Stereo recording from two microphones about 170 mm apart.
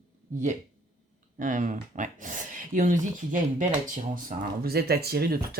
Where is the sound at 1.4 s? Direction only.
50° right (ahead or behind).